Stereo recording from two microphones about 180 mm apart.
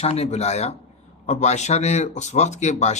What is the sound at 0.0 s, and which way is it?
Speech, 35° left (ahead or behind).